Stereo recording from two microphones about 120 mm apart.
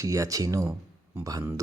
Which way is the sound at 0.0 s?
25° right (ahead or behind).